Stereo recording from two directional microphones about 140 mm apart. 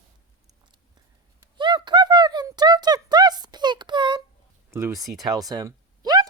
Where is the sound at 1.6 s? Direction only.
35° right (ahead or behind).